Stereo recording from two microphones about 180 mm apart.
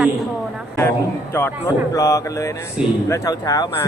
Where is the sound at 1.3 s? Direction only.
15° left (ahead or behind).